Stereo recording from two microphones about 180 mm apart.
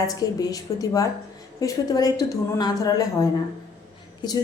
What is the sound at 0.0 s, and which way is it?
Speech, 20° left (ahead or behind).